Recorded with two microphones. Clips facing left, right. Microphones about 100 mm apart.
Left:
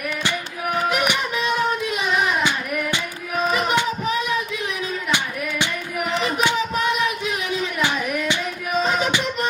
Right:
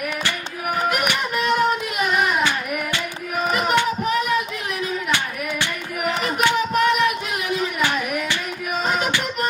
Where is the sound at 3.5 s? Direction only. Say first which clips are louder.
Even; 5° right (ahead or behind).